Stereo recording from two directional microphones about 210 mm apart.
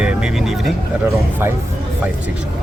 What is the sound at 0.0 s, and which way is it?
Vehicle, 5° right (ahead or behind).